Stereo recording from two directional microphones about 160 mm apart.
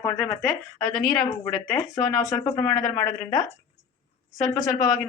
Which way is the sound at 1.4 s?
15° left (ahead or behind).